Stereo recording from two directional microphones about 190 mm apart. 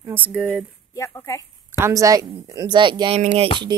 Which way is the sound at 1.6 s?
15° right (ahead or behind).